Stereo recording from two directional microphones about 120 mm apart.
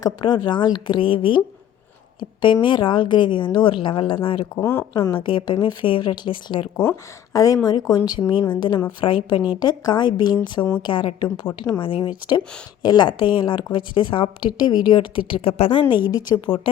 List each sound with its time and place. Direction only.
0.0 s speech: 35° left (ahead or behind)
2.4 s a woman's voice: 40° left (ahead or behind)
4.6 s speech: 20° left (ahead or behind)
5.1 s a woman's voice: 45° left (ahead or behind)
6.9 s a woman's voice: 30° left (ahead or behind); by 16.0 s 50° left (ahead or behind)